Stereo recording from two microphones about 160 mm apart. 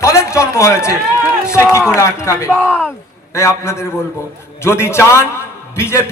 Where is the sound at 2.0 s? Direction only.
20° left (ahead or behind).